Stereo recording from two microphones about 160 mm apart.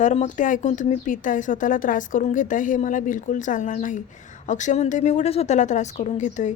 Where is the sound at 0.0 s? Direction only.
45° left (ahead or behind).